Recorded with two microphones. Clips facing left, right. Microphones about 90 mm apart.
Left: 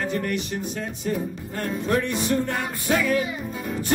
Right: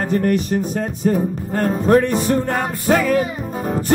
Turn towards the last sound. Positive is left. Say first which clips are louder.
# right 6 dB
turn(degrees=-45)  # may be behind; listen again after turning